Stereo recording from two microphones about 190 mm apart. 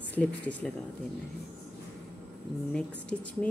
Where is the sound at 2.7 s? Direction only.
5° left (ahead or behind).